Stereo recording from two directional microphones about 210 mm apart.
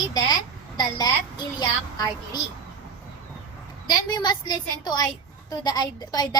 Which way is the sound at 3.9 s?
20° left (ahead or behind).